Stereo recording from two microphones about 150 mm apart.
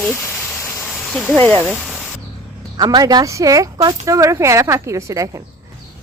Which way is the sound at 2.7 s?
30° right (ahead or behind).